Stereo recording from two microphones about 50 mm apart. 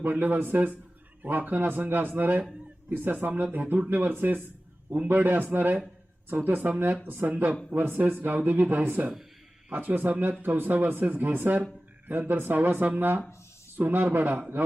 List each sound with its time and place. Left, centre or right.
0.0 s a man's voice: right